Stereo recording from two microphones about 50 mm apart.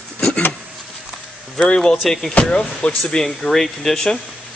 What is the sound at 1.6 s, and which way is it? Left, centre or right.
Speech, centre.